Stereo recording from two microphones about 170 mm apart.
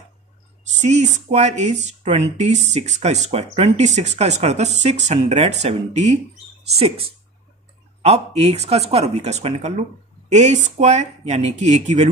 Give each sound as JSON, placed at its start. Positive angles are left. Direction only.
{"t": 0.7, "sound": "speech", "side_deg": -40}
{"t": 8.0, "sound": "speech", "side_deg": -40}